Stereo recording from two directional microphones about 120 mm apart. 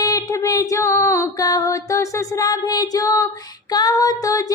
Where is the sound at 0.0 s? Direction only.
30° left (ahead or behind).